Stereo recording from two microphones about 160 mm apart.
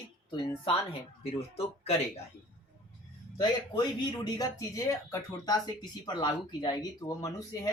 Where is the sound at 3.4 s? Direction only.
25° left (ahead or behind).